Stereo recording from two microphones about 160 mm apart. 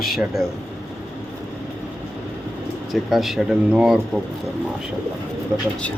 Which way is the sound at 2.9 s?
Centre (ahead or behind).